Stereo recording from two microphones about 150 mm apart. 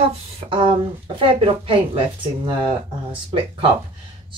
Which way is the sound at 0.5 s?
35° right (ahead or behind).